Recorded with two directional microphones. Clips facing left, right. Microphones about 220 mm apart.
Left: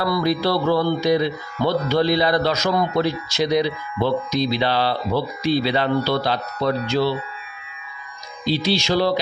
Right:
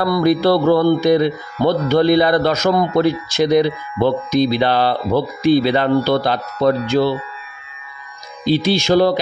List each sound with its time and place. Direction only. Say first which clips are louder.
0.0 s music: right 6 dB; 50° right (ahead or behind)
8.5 s music: right 5 dB; 50° right (ahead or behind)